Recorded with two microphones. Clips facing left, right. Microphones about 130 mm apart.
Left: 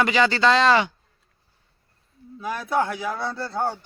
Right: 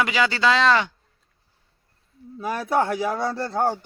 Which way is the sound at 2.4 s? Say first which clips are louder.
Right 2 dB; 40° right (ahead or behind).